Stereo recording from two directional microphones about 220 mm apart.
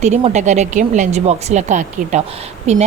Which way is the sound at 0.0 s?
30° right (ahead or behind).